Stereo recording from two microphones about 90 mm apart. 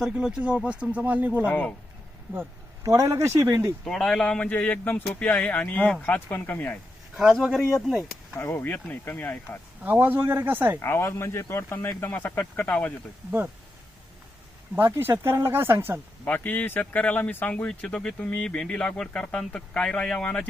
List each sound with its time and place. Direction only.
0.0 s speech: 10° right (ahead or behind)
1.5 s speech: 20° left (ahead or behind)
2.8 s speech: 40° right (ahead or behind)
3.8 s speech: 5° left (ahead or behind)
7.2 s speech: 5° right (ahead or behind)
8.4 s speech: 25° left (ahead or behind)
9.8 s speech: 20° right (ahead or behind)
10.8 s speech: 30° left (ahead or behind)
14.8 s speech: 25° right (ahead or behind)
16.2 s speech: 20° left (ahead or behind)